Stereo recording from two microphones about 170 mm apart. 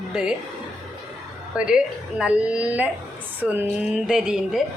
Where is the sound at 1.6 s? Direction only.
5° right (ahead or behind).